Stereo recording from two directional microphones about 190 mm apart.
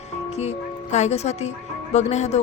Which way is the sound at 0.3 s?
35° left (ahead or behind).